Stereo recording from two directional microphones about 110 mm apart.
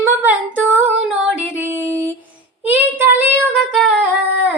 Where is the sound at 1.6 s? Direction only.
15° right (ahead or behind).